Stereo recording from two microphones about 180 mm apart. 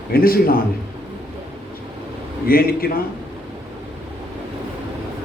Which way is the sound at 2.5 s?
55° left (ahead or behind).